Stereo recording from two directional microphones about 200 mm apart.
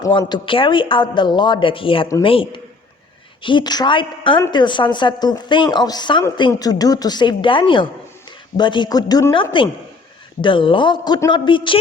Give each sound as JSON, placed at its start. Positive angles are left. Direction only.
{"t": 0.0, "sound": "a woman's voice", "side_deg": 20}